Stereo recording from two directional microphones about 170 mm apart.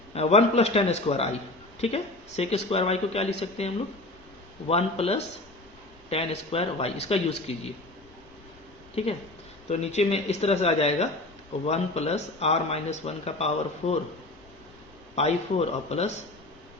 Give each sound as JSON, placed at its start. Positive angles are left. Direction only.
{"t": 0.1, "sound": "speech", "side_deg": 35}
{"t": 4.7, "sound": "speech", "side_deg": 35}
{"t": 9.0, "sound": "speech", "side_deg": 35}
{"t": 15.1, "sound": "speech", "side_deg": 40}